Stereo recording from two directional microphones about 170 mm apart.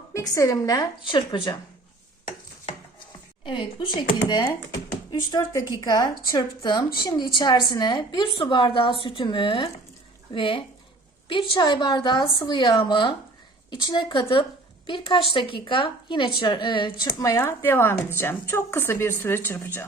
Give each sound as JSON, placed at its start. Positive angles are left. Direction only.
{"t": 0.1, "sound": "a woman's voice", "side_deg": 20}
{"t": 3.4, "sound": "a woman's voice", "side_deg": 30}